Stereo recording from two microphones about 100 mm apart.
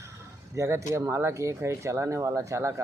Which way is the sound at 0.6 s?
30° right (ahead or behind).